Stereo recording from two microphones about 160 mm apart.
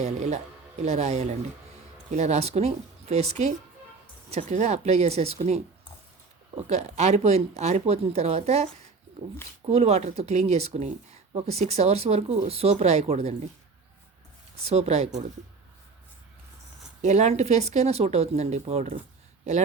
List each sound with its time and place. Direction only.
0.0 s speech: 45° right (ahead or behind)
6.7 s speech: 45° right (ahead or behind)
14.6 s speech: 40° right (ahead or behind)
17.0 s speech: 45° right (ahead or behind)